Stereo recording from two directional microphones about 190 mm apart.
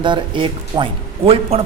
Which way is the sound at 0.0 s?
25° right (ahead or behind).